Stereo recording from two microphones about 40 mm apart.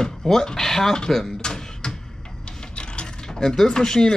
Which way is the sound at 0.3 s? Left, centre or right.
Centre.